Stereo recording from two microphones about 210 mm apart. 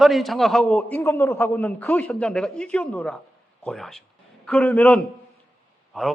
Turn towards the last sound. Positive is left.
turn(degrees=0)  # may be behind; listen again after turning